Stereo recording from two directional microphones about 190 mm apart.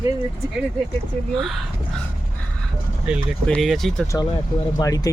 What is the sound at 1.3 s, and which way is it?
Speech, centre (ahead or behind).